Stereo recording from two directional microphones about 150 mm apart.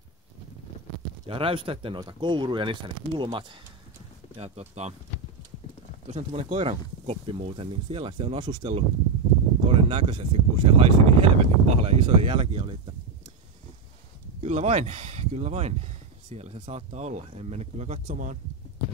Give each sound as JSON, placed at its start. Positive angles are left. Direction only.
{"t": 1.2, "sound": "speech", "side_deg": -35}
{"t": 4.4, "sound": "speech", "side_deg": -45}
{"t": 6.0, "sound": "speech", "side_deg": -45}
{"t": 14.4, "sound": "speech", "side_deg": -45}